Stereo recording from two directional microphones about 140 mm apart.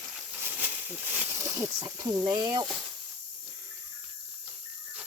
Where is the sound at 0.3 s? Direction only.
15° right (ahead or behind).